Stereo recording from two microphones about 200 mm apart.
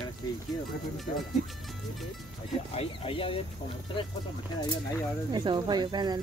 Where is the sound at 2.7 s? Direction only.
30° left (ahead or behind).